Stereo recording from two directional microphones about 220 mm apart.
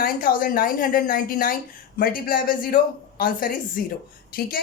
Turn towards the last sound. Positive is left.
turn(degrees=45)  # may be behind; listen again after turning